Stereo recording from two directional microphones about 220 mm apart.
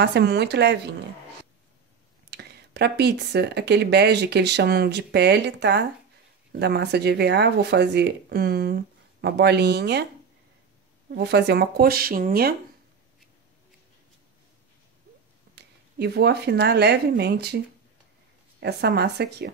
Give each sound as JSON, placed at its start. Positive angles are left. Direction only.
{"t": 0.0, "sound": "speech", "side_deg": -50}
{"t": 2.3, "sound": "speech", "side_deg": -50}
{"t": 11.1, "sound": "speech", "side_deg": -50}
{"t": 15.5, "sound": "speech", "side_deg": -50}
{"t": 18.6, "sound": "speech", "side_deg": -50}